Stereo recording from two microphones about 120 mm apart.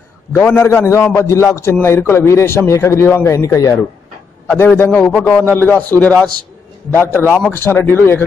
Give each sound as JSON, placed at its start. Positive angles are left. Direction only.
{"t": 0.3, "sound": "a man's voice", "side_deg": 15}
{"t": 4.5, "sound": "a man's voice", "side_deg": 15}